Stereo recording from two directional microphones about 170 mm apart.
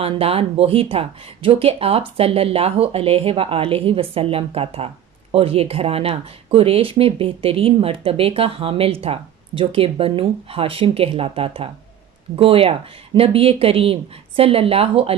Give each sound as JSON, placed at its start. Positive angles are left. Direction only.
{"t": 0.0, "sound": "speech", "side_deg": -35}